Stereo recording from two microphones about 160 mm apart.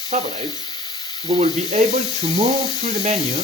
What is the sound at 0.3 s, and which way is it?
Sizzle, 25° left (ahead or behind).